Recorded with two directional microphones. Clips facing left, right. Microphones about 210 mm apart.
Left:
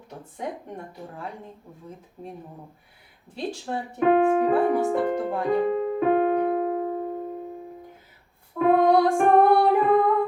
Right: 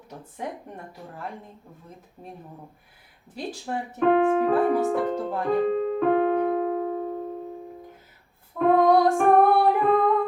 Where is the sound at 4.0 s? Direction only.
10° left (ahead or behind).